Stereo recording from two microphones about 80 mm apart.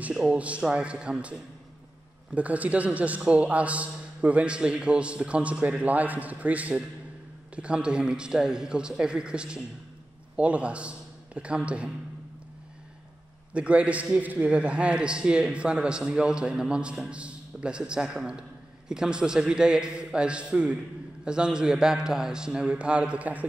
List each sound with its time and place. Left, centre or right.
0.1 s a man's voice: centre
13.5 s a man's voice: centre